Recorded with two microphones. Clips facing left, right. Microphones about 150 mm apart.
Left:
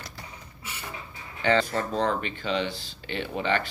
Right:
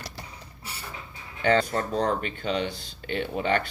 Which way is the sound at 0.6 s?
35° right (ahead or behind).